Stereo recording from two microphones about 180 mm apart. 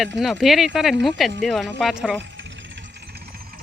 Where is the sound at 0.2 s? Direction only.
Centre (ahead or behind).